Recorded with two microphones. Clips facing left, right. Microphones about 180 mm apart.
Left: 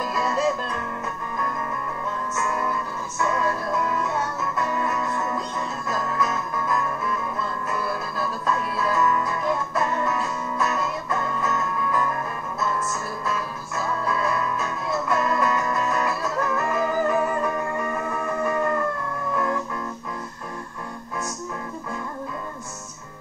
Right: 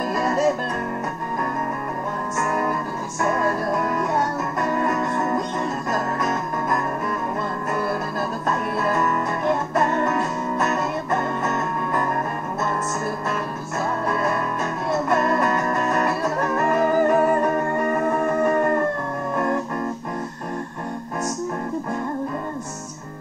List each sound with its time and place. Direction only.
0.1 s music: 50° right (ahead or behind)
2.3 s music: 50° right (ahead or behind)
8.2 s music: 50° right (ahead or behind)
13.8 s music: 50° right (ahead or behind)